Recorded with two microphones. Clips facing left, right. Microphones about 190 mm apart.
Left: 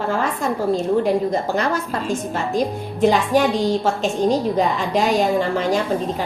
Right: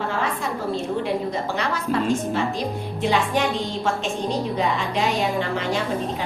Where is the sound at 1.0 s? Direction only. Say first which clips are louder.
Left 5 dB; 45° left (ahead or behind).